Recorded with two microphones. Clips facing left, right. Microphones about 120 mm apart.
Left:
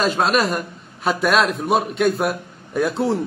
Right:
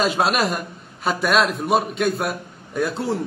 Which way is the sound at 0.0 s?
Centre (ahead or behind).